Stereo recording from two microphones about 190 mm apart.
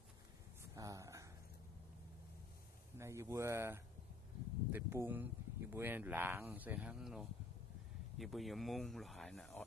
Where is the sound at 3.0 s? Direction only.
15° right (ahead or behind); by 9.6 s centre (ahead or behind).